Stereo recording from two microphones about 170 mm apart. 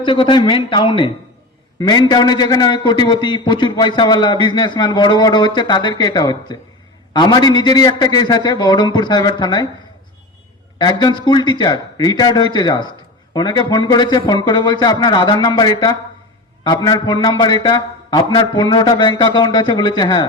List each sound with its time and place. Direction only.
0.0 s a man's voice: 30° left (ahead or behind)
10.8 s a man's voice: 25° left (ahead or behind)